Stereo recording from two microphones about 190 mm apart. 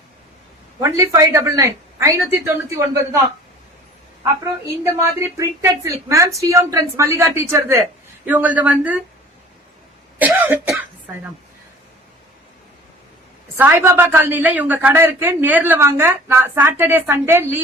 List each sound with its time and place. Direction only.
0.8 s a woman's voice: 15° right (ahead or behind)
4.8 s a woman's voice: 15° right (ahead or behind)
10.2 s a woman's voice: 10° right (ahead or behind)
13.6 s a woman's voice: 10° right (ahead or behind)